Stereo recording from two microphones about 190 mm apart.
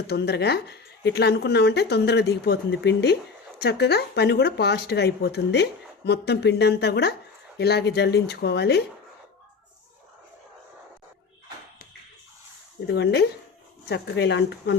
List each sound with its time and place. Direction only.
0.1 s speech: 60° left (ahead or behind)
12.9 s speech: 60° left (ahead or behind)